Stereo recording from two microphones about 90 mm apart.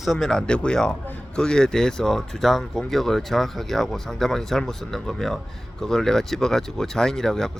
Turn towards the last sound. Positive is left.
turn(degrees=5)  # may be behind; listen again after turning